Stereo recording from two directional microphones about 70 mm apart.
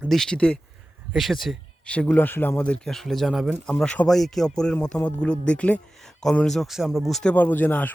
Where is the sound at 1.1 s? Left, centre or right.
Centre.